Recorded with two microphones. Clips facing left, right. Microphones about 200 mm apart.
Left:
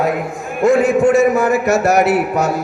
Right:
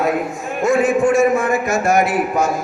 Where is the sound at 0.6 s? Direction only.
65° left (ahead or behind).